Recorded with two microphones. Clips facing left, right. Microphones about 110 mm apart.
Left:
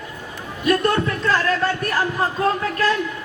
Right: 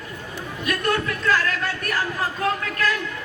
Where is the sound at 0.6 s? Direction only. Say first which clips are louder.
Left 5 dB; 30° left (ahead or behind).